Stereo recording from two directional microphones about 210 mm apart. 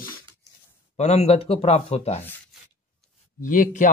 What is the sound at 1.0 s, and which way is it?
A man's voice, 30° left (ahead or behind).